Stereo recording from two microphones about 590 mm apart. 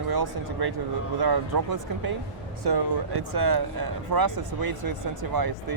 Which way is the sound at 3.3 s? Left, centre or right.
Right.